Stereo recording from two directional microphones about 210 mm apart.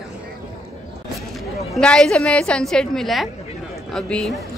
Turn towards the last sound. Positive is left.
turn(degrees=5)  # may be behind; listen again after turning